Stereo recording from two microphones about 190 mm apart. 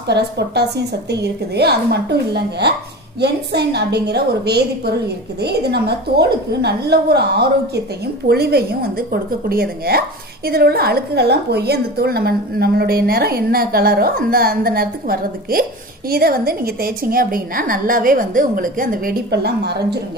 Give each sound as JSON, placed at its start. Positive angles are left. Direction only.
{"t": 0.1, "sound": "a woman's voice", "side_deg": -60}